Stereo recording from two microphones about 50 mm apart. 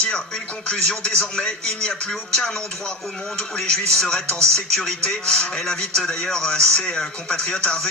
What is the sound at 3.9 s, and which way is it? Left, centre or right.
Speech, centre.